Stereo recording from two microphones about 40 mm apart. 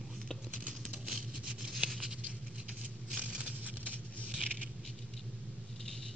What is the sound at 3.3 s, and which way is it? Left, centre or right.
Patter, right.